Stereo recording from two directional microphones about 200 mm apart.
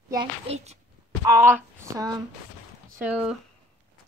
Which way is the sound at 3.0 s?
5° right (ahead or behind).